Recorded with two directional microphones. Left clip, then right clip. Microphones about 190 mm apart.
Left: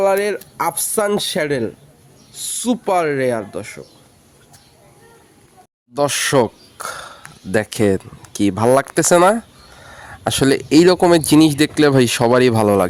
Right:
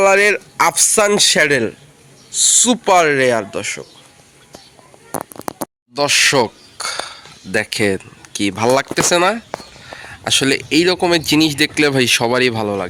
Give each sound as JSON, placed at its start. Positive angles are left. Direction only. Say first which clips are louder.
{"t": 0.0, "sound": "speech", "louder": "right 5 dB", "side_deg": 0}
{"t": 5.9, "sound": "speech", "louder": "right 3 dB", "side_deg": 25}
{"t": 10.2, "sound": "speech", "louder": "right 1 dB", "side_deg": 30}